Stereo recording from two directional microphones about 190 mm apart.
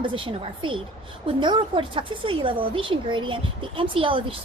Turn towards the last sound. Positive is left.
turn(degrees=-30)  # may be behind; listen again after turning